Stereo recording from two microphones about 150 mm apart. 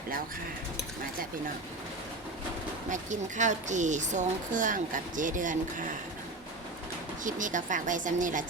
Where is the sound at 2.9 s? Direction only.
55° right (ahead or behind).